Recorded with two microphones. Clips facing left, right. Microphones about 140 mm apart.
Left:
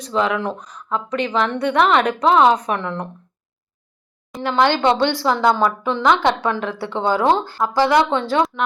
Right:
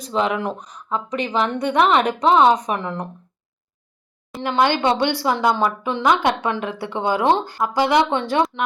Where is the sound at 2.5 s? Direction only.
10° right (ahead or behind).